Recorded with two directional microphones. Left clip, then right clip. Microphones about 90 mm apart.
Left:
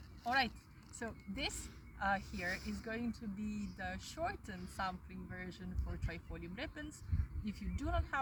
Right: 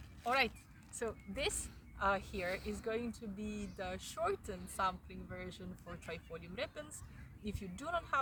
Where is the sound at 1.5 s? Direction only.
30° right (ahead or behind).